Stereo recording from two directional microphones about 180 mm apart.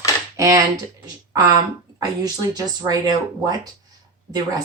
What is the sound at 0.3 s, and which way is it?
Speech, 15° right (ahead or behind).